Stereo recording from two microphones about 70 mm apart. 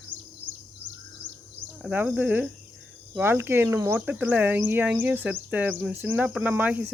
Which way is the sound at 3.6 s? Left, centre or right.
Right.